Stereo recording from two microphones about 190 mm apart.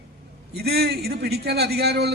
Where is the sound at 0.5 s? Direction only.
55° right (ahead or behind).